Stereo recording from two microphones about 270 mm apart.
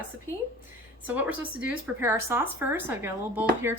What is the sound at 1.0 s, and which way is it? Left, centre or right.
Speech, centre.